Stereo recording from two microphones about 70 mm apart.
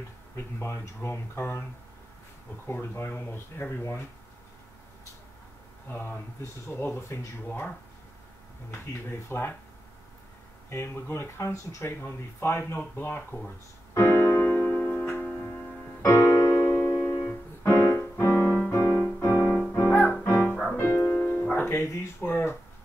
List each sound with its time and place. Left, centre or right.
0.4 s speech: left
2.6 s speech: left
3.1 s speech: left
5.9 s speech: left
9.3 s speech: left
10.7 s speech: left
13.9 s music: left
16.0 s music: left
19.5 s music: left
21.6 s music: left
22.3 s a sound: left